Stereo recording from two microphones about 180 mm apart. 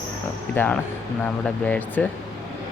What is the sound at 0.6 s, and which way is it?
Speech, 10° left (ahead or behind).